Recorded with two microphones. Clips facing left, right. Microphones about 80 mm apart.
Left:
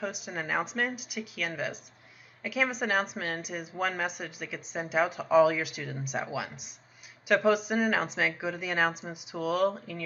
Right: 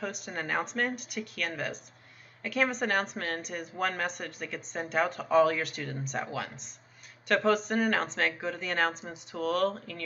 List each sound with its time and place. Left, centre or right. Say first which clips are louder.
0.0 s a woman's voice: left 1 dB; centre